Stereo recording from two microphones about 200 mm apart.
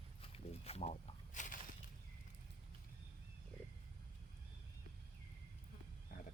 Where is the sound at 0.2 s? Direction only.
30° left (ahead or behind).